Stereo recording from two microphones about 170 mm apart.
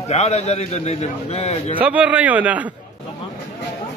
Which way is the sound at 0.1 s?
40° left (ahead or behind).